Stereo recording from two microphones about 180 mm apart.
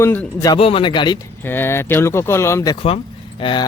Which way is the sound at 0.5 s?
30° left (ahead or behind).